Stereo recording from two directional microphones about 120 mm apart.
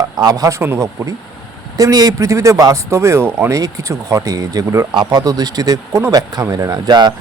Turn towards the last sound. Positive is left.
turn(degrees=-35)  # may be behind; listen again after turning